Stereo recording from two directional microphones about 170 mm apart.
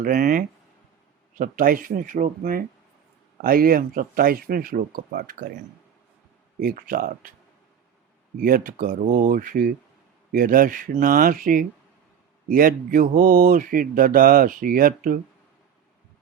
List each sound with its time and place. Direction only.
0.0 s speech: 55° right (ahead or behind)
6.6 s speech: 55° right (ahead or behind)
8.4 s speech: 55° right (ahead or behind)